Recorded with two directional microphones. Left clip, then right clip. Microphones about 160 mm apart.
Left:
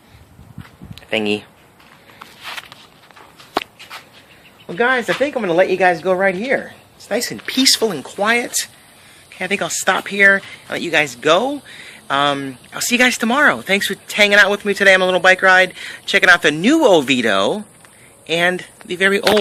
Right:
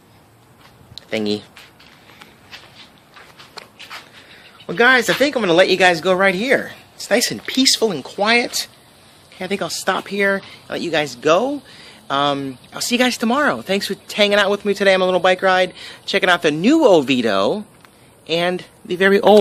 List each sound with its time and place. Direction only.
1.1 s speech: 15° right (ahead or behind)
4.6 s speech: 55° right (ahead or behind); by 6.5 s 35° right (ahead or behind)
6.5 s a sound: 55° right (ahead or behind)
7.4 s speech: 15° right (ahead or behind)
18.9 s speech: 40° right (ahead or behind)